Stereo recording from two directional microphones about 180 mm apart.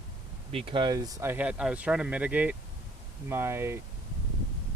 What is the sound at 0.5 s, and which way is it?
Speech, 30° right (ahead or behind).